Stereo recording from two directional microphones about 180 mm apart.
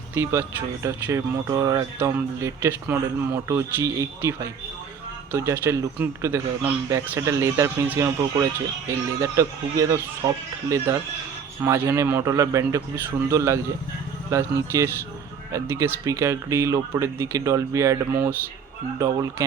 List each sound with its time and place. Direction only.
0.1 s speech: 15° right (ahead or behind)